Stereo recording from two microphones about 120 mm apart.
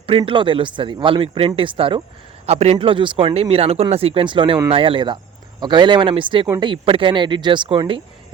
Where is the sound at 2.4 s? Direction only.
65° right (ahead or behind).